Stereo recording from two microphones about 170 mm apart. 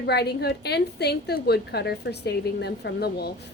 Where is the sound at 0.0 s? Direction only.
75° left (ahead or behind).